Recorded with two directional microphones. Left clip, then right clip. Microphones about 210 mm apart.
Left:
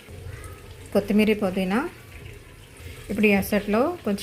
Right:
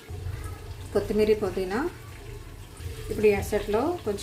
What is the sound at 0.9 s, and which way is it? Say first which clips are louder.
Speech: left 1 dB; 30° left (ahead or behind).